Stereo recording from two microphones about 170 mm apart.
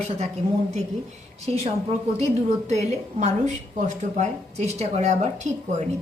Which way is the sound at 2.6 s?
40° right (ahead or behind).